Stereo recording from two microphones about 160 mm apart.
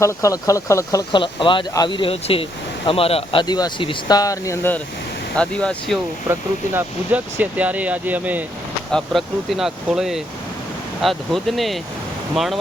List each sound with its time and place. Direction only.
0.0 s speech: 20° left (ahead or behind); by 3.4 s 35° left (ahead or behind)
3.4 s speech: 25° left (ahead or behind); by 6.0 s 5° left (ahead or behind)
6.7 s speech: 10° right (ahead or behind)
8.9 s speech: centre (ahead or behind)